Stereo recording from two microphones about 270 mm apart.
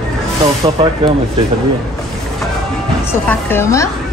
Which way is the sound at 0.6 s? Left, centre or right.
Centre.